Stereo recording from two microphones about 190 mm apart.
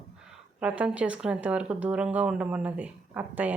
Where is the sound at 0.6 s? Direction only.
5° right (ahead or behind).